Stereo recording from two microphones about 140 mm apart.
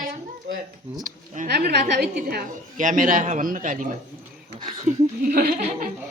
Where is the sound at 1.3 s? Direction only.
70° right (ahead or behind).